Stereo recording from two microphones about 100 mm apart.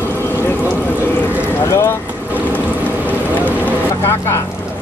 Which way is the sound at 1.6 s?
25° left (ahead or behind).